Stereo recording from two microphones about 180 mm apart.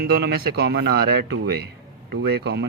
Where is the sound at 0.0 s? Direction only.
60° right (ahead or behind).